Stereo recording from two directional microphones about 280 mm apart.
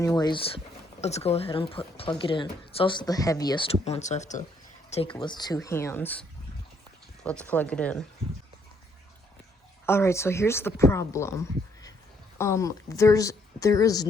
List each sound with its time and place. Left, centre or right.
0.0 s speech: centre
5.0 s speech: centre
7.3 s speech: centre
9.8 s speech: centre